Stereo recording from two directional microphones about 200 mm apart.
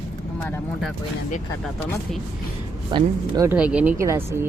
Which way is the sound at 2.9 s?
20° right (ahead or behind).